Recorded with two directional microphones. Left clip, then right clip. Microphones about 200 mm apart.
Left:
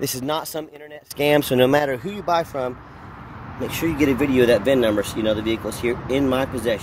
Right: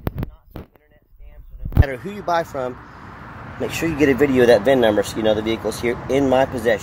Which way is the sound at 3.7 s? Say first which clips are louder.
Right 1 dB; 40° right (ahead or behind).